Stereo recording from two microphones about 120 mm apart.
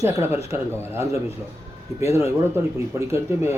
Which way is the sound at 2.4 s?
25° right (ahead or behind).